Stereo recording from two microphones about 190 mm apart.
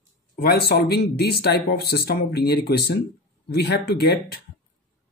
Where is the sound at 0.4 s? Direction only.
55° left (ahead or behind).